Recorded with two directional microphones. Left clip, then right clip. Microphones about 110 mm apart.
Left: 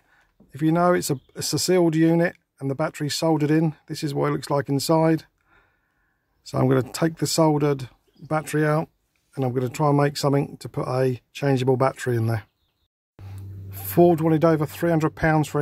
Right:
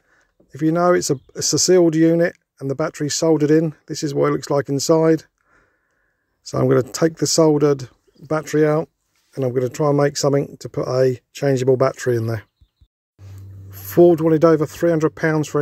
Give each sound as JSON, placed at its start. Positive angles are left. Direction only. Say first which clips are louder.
{"t": 0.1, "sound": "speech", "louder": "right 5 dB", "side_deg": -30}
{"t": 13.7, "sound": "speech", "louder": "right 5 dB", "side_deg": -25}